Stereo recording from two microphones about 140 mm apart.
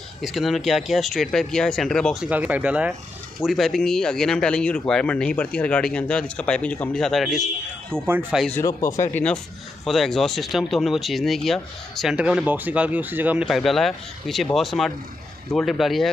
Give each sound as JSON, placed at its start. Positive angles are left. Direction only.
{"t": 0.2, "sound": "speech", "side_deg": 0}
{"t": 2.2, "sound": "speech", "side_deg": -10}
{"t": 8.1, "sound": "speech", "side_deg": -15}
{"t": 8.5, "sound": "speech", "side_deg": 25}
{"t": 9.1, "sound": "speech", "side_deg": 10}
{"t": 13.5, "sound": "speech", "side_deg": 0}